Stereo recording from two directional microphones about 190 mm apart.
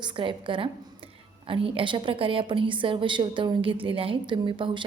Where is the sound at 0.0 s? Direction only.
25° right (ahead or behind).